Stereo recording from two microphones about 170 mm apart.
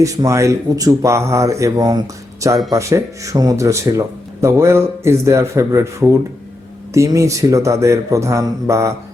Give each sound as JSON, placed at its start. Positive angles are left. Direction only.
{"t": 0.0, "sound": "speech", "side_deg": -20}